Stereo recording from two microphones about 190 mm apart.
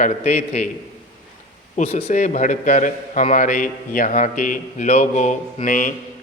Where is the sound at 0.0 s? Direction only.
35° left (ahead or behind).